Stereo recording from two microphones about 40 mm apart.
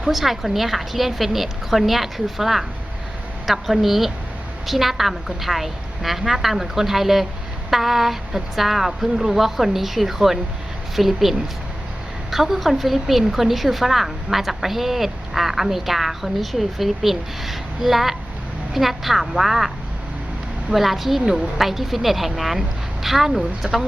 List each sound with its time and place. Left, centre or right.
0.1 s a woman's voice: centre
20.7 s a woman's voice: centre
23.6 s speech: right